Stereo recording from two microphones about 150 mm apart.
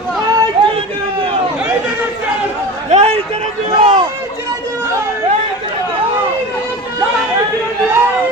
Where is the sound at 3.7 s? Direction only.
35° right (ahead or behind).